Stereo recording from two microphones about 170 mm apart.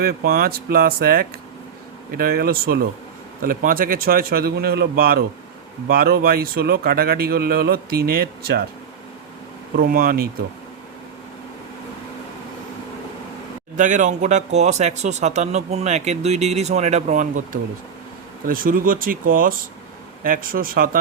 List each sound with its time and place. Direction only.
0.0 s a man's voice: 60° right (ahead or behind)
9.7 s a man's voice: 60° right (ahead or behind)
13.7 s a man's voice: 50° right (ahead or behind)